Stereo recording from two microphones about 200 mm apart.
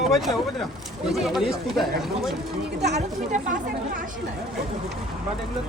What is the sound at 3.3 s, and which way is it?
Speech, 40° right (ahead or behind).